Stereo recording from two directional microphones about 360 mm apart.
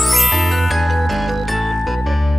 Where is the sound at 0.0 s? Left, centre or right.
Centre.